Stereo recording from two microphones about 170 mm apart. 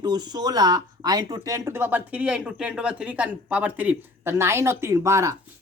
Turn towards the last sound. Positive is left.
turn(degrees=-15)  # may be behind; listen again after turning